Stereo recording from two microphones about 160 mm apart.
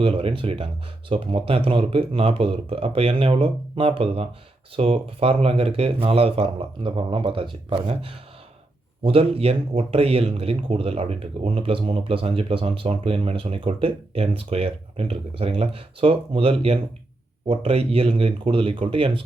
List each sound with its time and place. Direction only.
0.0 s speech: 35° right (ahead or behind)